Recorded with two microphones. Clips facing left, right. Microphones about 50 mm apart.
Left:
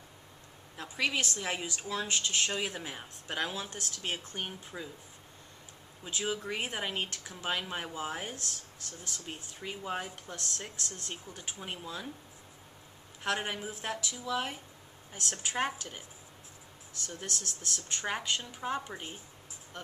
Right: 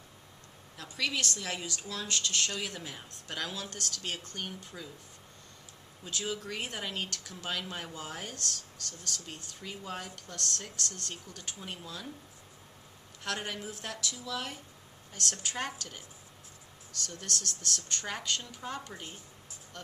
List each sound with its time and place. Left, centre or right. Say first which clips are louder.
0.8 s speech: left 2 dB; left
6.0 s speech: left 2 dB; centre
13.2 s speech: left 3 dB; left
17.0 s speech: right 2 dB; centre